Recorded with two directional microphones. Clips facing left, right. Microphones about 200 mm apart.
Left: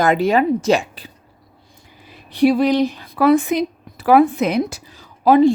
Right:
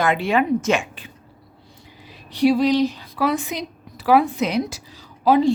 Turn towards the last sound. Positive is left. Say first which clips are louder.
# left 5 dB
turn(degrees=55)  # may be behind; listen again after turning